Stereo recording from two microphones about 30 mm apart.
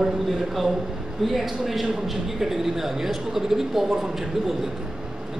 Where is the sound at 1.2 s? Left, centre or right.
Centre.